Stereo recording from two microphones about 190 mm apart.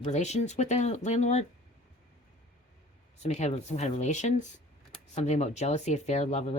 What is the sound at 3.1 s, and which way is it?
Speech, 35° left (ahead or behind).